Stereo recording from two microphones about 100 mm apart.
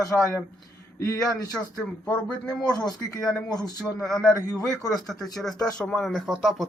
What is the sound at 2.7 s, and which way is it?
Speech, 40° left (ahead or behind).